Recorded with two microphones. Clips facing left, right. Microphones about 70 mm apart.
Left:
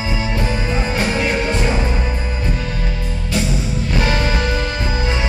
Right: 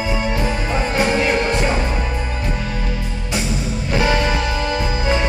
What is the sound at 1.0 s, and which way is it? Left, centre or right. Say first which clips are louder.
Music: right 2 dB; centre.